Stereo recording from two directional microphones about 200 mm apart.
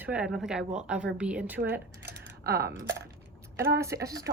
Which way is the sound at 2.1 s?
55° right (ahead or behind).